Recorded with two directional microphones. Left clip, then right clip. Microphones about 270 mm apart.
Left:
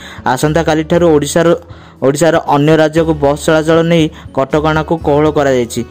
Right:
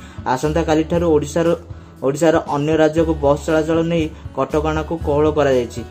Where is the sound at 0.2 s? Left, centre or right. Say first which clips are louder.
Left 6 dB; left.